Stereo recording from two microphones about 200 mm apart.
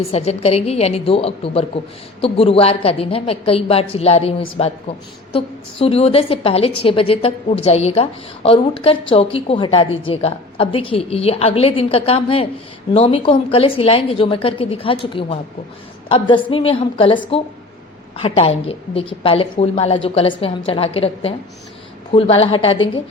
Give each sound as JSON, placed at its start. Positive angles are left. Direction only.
{"t": 0.1, "sound": "a woman's voice", "side_deg": 30}
{"t": 18.2, "sound": "a woman's voice", "side_deg": 30}